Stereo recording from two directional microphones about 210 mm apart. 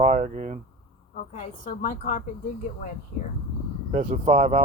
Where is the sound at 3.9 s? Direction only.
35° right (ahead or behind).